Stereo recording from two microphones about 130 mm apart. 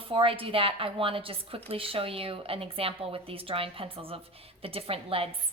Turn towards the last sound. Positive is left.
turn(degrees=-45)  # may be behind; listen again after turning